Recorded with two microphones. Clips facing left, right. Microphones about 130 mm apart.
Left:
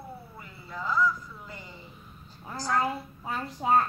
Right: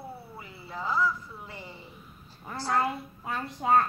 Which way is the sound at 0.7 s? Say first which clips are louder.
Left 1 dB; 30° right (ahead or behind).